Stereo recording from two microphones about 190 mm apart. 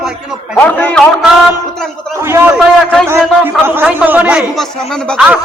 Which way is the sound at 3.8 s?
10° right (ahead or behind).